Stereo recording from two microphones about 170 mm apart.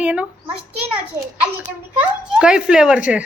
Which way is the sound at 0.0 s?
5° right (ahead or behind).